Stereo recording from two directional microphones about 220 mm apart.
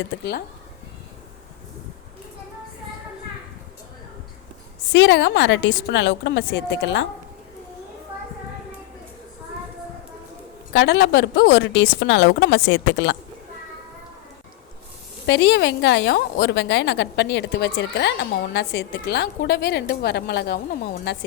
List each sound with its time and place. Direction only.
4.9 s a woman's voice: 55° left (ahead or behind)
10.7 s a woman's voice: 55° left (ahead or behind)
15.3 s a woman's voice: 50° left (ahead or behind)